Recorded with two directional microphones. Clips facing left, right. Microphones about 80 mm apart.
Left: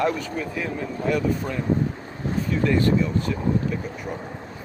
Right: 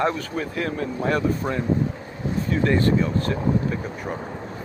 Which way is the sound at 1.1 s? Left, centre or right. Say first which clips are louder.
Even; right.